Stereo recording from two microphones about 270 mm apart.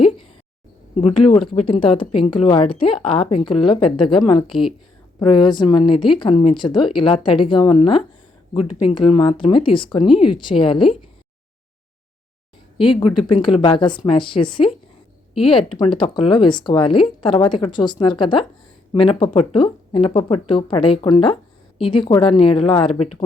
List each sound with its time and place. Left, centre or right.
1.0 s a woman's voice: centre
12.7 s a woman's voice: centre
15.8 s a woman's voice: centre